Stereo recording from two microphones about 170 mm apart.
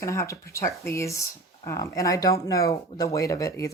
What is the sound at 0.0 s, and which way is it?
A woman's voice, 15° left (ahead or behind).